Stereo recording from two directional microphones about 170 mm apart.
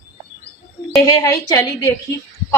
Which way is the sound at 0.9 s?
15° left (ahead or behind).